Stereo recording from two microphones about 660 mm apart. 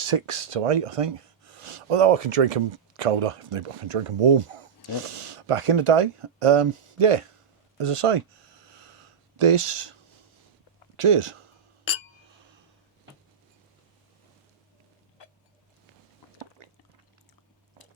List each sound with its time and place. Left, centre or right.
0.0 s speech: right
7.8 s a sound: right
9.4 s speech: right
10.9 s speech: right